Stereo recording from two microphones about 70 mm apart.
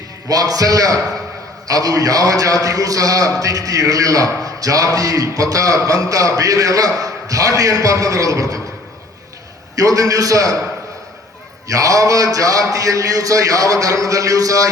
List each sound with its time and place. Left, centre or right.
0.3 s a man's voice: right
9.7 s a man's voice: right
11.7 s a man's voice: right